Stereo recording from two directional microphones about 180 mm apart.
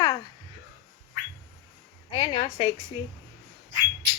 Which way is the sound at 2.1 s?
30° left (ahead or behind).